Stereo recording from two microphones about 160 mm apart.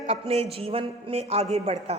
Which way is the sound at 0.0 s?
40° right (ahead or behind).